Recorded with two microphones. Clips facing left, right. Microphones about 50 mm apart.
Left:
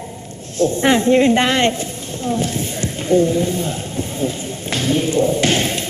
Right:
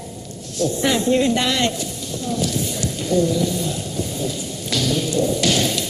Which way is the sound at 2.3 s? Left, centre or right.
Left.